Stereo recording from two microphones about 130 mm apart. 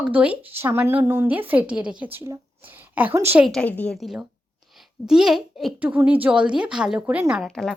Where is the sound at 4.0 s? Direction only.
Centre (ahead or behind).